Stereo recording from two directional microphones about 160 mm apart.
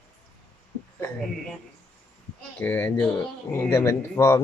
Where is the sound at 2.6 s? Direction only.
15° left (ahead or behind).